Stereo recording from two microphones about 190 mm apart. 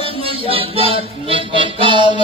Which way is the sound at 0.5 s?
30° right (ahead or behind).